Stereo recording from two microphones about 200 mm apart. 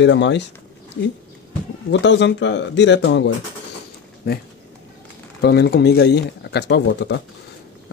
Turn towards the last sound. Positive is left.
turn(degrees=60)  # may be behind; listen again after turning